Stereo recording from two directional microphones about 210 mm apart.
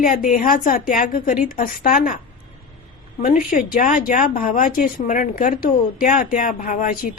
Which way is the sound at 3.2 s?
40° left (ahead or behind).